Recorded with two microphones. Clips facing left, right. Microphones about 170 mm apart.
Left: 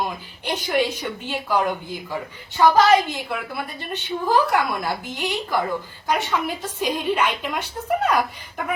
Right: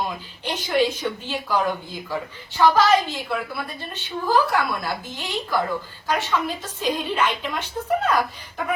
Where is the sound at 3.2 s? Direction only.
15° left (ahead or behind).